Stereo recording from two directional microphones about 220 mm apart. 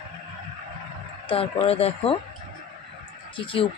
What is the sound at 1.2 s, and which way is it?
Speech, 25° left (ahead or behind).